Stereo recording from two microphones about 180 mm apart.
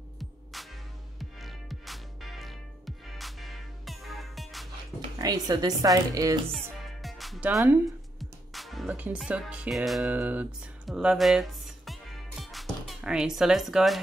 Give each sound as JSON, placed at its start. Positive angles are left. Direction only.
{"t": 0.2, "sound": "music", "side_deg": 0}
{"t": 5.2, "sound": "a woman's voice", "side_deg": -20}
{"t": 6.5, "sound": "music", "side_deg": 0}